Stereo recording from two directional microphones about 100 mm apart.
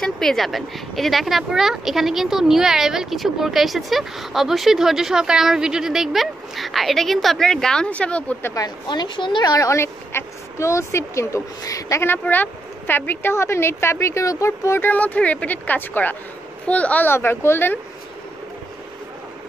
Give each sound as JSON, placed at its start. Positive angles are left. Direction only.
{"t": 0.0, "sound": "a woman's voice", "side_deg": 5}
{"t": 8.5, "sound": "speech", "side_deg": 45}